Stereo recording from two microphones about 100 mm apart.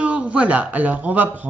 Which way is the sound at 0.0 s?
10° right (ahead or behind).